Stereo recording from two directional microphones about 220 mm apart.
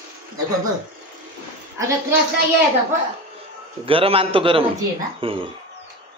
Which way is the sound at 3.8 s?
25° right (ahead or behind).